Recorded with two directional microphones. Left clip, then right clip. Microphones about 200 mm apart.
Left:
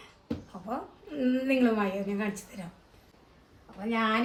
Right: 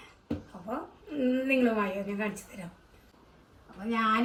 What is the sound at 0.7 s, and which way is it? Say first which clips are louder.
A woman's voice: even; 5° left (ahead or behind).